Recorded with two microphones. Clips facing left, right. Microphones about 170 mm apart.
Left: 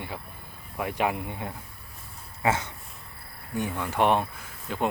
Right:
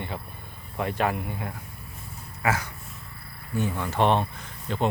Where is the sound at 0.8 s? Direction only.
10° left (ahead or behind).